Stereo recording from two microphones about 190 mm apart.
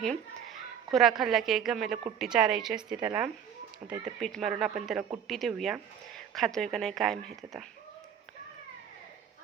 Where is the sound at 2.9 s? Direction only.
20° right (ahead or behind).